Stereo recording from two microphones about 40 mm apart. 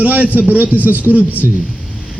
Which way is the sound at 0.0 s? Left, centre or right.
Right.